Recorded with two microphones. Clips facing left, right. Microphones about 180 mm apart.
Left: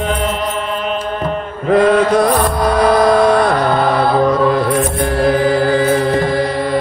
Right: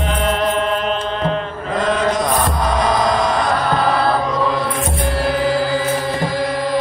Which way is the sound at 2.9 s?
60° left (ahead or behind).